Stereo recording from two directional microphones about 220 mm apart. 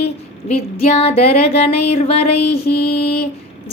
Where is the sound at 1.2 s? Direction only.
25° left (ahead or behind).